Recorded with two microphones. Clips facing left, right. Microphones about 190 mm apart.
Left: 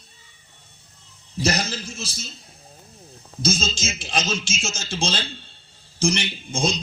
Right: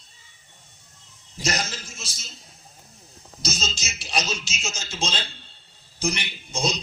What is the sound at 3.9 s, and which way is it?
Speech, 90° left.